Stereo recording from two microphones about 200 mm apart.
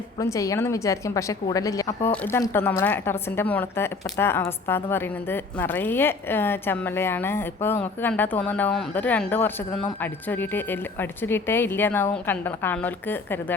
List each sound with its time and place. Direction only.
0.2 s a woman's voice: 15° left (ahead or behind)